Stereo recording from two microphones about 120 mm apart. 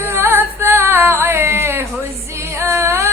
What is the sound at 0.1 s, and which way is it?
Singing, 20° right (ahead or behind).